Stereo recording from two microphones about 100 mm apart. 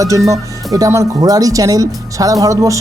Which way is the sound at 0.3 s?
35° right (ahead or behind).